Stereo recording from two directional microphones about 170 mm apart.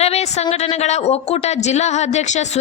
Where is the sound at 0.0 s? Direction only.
40° left (ahead or behind).